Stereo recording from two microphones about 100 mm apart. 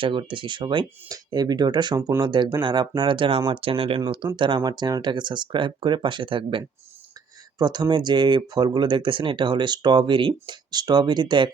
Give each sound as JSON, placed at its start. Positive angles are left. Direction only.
{"t": 0.0, "sound": "speech", "side_deg": -55}
{"t": 1.0, "sound": "speech", "side_deg": -40}
{"t": 4.4, "sound": "speech", "side_deg": -55}
{"t": 7.6, "sound": "speech", "side_deg": -45}